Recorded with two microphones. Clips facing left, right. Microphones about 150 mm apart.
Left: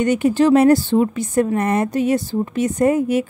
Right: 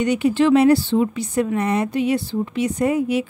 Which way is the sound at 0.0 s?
45° left (ahead or behind).